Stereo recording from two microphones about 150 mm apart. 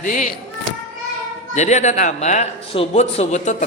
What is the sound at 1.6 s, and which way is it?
Speech, 50° left (ahead or behind).